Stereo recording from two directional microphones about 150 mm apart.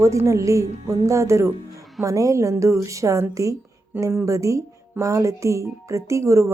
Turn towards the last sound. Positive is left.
turn(degrees=-20)  # may be behind; listen again after turning